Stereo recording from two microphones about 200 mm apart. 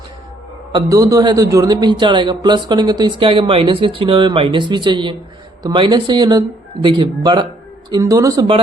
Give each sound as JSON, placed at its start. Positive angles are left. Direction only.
{"t": 0.7, "sound": "a man's voice", "side_deg": -20}